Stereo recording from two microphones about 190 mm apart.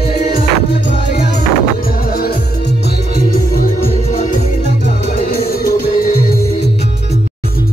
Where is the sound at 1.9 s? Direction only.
50° left (ahead or behind).